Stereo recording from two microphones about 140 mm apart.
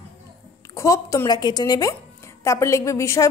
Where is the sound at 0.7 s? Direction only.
20° left (ahead or behind).